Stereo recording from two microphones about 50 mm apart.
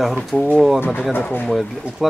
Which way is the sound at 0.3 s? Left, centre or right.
Left.